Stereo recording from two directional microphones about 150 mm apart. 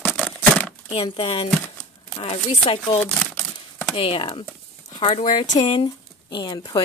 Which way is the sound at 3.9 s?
35° left (ahead or behind).